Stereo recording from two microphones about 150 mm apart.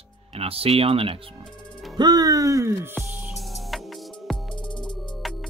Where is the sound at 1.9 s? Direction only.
25° right (ahead or behind).